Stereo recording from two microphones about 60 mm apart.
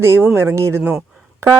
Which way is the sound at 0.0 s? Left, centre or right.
Right.